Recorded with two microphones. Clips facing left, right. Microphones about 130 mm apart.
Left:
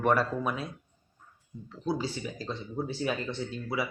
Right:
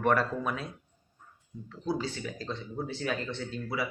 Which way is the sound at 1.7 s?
10° left (ahead or behind).